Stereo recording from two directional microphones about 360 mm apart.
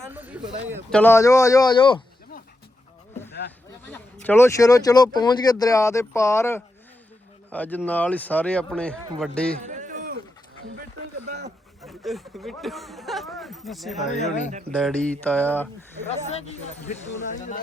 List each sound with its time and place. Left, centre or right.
0.1 s speech: centre
3.8 s speech: centre
9.6 s a sound: right
11.3 s speech: right
11.8 s speech: centre
14.0 s speech: centre
14.8 s speech: centre
16.0 s speech: centre